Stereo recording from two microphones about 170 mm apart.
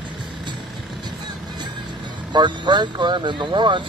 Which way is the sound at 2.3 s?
25° right (ahead or behind).